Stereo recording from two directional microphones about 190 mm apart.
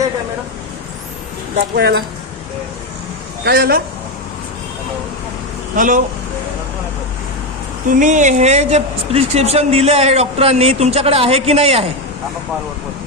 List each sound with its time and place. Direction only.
1.7 s speech: 60° right (ahead or behind)
3.4 s a man's voice: 50° right (ahead or behind)
5.7 s speech: 45° right (ahead or behind)
7.9 s speech: 40° right (ahead or behind)